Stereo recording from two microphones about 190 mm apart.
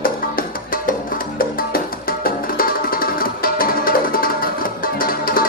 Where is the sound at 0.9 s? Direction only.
50° left (ahead or behind).